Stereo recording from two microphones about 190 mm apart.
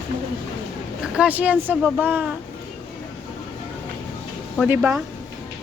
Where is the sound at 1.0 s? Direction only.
5° right (ahead or behind).